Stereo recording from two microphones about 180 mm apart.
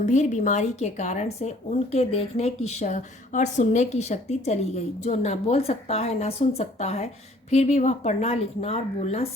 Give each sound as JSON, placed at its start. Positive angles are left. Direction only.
{"t": 0.0, "sound": "speech", "side_deg": 40}